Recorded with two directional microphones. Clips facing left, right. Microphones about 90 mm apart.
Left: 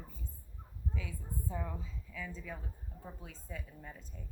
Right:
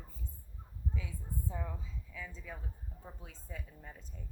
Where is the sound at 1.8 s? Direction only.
15° right (ahead or behind).